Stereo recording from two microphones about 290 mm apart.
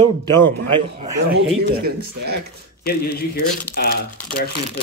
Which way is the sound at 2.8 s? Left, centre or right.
Left.